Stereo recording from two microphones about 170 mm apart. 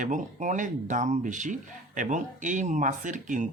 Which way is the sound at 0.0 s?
45° right (ahead or behind).